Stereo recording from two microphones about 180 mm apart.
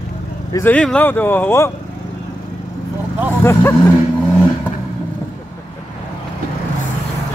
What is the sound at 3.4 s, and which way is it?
Speech, 15° left (ahead or behind).